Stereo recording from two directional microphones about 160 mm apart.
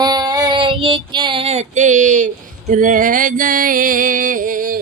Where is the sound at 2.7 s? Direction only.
55° right (ahead or behind).